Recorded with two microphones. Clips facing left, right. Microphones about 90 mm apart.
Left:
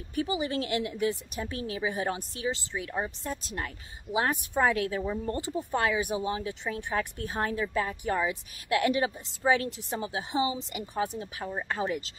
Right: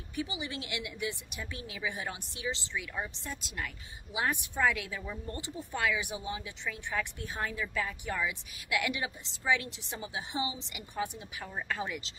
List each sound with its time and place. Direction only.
0.1 s speech: 40° left (ahead or behind)